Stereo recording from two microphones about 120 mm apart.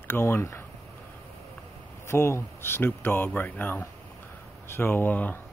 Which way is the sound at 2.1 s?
20° left (ahead or behind).